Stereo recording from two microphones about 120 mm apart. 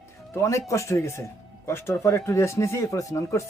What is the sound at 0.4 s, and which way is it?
Speech, 25° left (ahead or behind).